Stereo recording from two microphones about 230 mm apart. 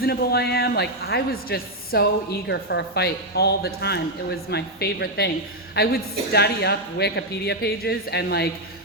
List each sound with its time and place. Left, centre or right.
0.0 s speech: left